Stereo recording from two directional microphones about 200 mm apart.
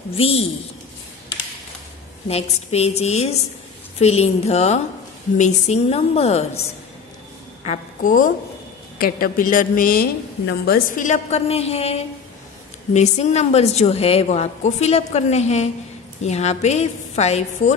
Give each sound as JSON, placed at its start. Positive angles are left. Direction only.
{"t": 0.1, "sound": "speech", "side_deg": 30}
{"t": 2.2, "sound": "a woman's voice", "side_deg": 30}
{"t": 7.6, "sound": "a woman's voice", "side_deg": 35}
{"t": 10.4, "sound": "a woman's voice", "side_deg": 55}